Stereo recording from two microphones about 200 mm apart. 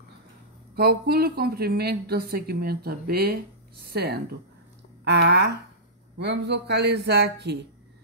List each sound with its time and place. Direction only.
0.7 s speech: 50° right (ahead or behind)